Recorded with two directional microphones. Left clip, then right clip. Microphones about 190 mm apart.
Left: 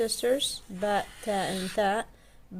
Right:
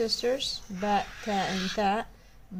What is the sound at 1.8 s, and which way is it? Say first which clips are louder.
Speech: left 1 dB; 40° left (ahead or behind).